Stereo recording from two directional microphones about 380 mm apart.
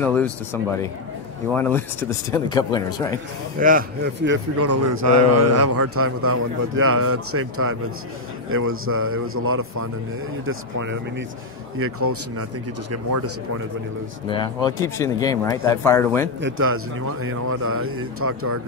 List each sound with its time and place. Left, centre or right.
0.0 s speech: centre
3.5 s a man's voice: right
14.2 s speech: centre
16.3 s a man's voice: right